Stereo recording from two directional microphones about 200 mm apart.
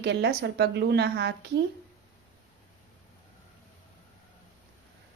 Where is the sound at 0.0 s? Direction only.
55° right (ahead or behind).